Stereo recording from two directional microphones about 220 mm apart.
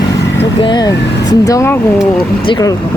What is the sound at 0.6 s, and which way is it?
Speech, 20° left (ahead or behind).